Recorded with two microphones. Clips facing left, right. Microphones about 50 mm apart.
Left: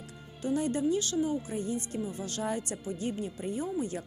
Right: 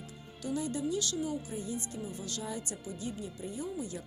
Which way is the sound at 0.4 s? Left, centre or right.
Left.